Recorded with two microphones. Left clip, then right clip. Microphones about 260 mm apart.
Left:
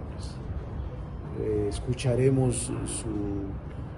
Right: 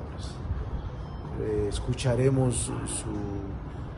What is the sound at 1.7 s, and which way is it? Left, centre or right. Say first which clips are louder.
Speech: even; centre.